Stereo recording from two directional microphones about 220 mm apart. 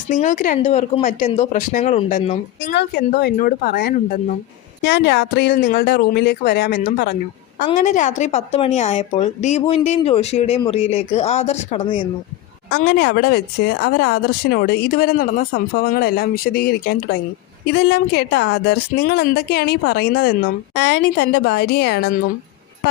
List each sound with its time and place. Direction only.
0.1 s a woman's voice: 35° left (ahead or behind)
2.7 s speech: 50° left (ahead or behind)
4.8 s speech: 50° left (ahead or behind)
5.5 s speech: 40° left (ahead or behind)
7.8 s a woman's voice: 35° left (ahead or behind)
12.7 s speech: 50° left (ahead or behind)